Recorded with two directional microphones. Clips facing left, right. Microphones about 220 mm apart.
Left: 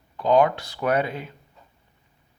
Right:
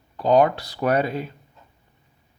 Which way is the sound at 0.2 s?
35° right (ahead or behind).